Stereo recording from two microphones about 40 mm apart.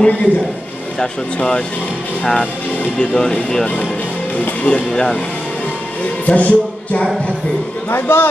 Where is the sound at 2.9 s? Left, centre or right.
Left.